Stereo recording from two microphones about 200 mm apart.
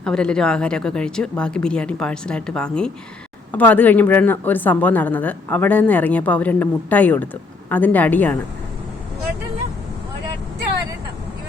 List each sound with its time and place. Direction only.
0.0 s a woman's voice: 5° left (ahead or behind)